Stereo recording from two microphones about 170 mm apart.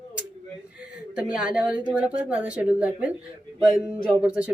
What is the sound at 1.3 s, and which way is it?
Speech, 5° right (ahead or behind).